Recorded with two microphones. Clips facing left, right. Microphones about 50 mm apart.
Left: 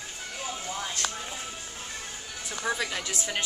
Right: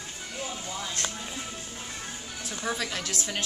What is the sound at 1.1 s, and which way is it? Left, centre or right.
Music, centre.